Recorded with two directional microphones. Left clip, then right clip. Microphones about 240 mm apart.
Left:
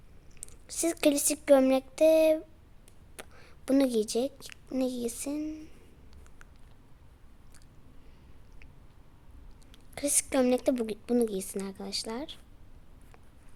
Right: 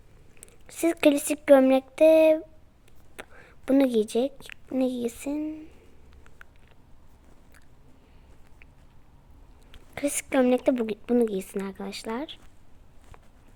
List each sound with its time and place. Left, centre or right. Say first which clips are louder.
0.7 s a woman's voice: right 5 dB; centre
9.7 s speech: right 3 dB; centre